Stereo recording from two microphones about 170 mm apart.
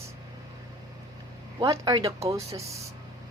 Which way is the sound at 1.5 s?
25° right (ahead or behind).